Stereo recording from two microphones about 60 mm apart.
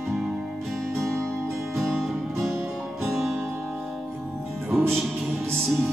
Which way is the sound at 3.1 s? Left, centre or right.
Centre.